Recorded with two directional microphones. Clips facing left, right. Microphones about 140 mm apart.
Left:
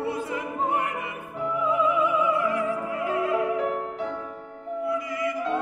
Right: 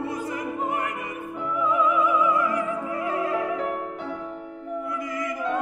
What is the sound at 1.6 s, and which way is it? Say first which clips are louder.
Music: right 1 dB; 35° left (ahead or behind).